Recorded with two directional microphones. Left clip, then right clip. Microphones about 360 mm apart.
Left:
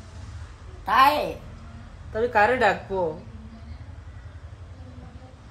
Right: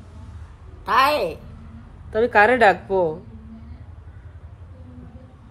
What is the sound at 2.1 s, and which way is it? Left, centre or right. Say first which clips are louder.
Speech: right 5 dB; centre.